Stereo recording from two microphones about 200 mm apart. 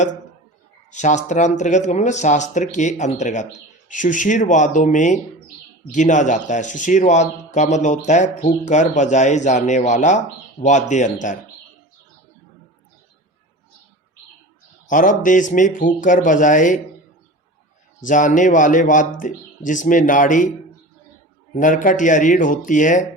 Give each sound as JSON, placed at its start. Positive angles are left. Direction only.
{"t": 0.9, "sound": "speech", "side_deg": 35}
{"t": 14.8, "sound": "speech", "side_deg": 40}
{"t": 18.0, "sound": "speech", "side_deg": 40}
{"t": 21.5, "sound": "speech", "side_deg": 40}